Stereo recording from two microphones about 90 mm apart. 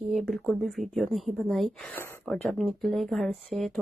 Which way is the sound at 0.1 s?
Centre (ahead or behind).